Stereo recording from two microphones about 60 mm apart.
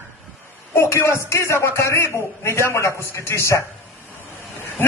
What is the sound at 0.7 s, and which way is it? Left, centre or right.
A man's voice, left.